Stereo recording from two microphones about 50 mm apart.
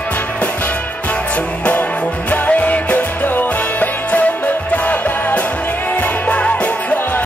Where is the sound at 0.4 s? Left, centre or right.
Left.